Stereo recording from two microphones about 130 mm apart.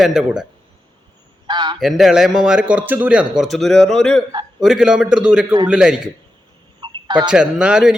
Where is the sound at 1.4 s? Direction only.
35° right (ahead or behind).